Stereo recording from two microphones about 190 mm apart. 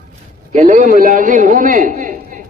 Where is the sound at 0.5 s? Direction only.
40° right (ahead or behind).